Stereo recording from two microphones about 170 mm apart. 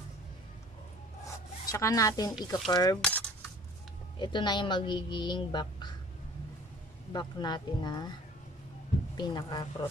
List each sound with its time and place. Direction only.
1.2 s rub: 20° left (ahead or behind)
2.7 s a woman's voice: 25° left (ahead or behind)
3.0 s cutlery: 10° left (ahead or behind)
4.2 s a woman's voice: 25° left (ahead or behind)
7.1 s a woman's voice: 25° left (ahead or behind)
9.1 s a woman's voice: 25° left (ahead or behind)